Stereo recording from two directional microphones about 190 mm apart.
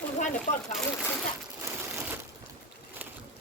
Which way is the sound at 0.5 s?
40° left (ahead or behind).